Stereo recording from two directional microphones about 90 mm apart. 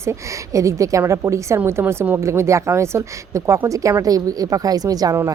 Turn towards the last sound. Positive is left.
turn(degrees=-45)  # may be behind; listen again after turning